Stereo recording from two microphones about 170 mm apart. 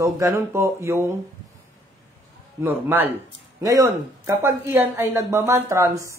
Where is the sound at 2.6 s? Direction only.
10° right (ahead or behind).